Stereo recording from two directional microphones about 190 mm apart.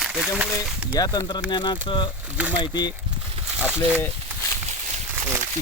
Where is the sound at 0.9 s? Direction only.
20° left (ahead or behind).